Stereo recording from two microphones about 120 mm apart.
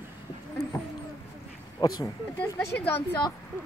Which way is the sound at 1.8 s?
35° left (ahead or behind).